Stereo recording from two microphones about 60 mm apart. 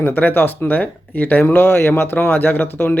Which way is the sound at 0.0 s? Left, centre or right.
Left.